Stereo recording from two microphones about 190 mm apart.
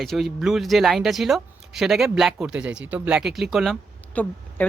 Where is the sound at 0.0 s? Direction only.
Centre (ahead or behind).